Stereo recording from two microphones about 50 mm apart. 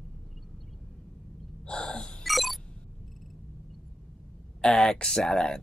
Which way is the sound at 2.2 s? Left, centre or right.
Centre.